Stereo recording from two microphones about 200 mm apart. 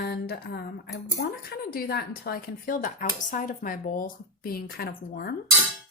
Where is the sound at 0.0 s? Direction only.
55° left (ahead or behind).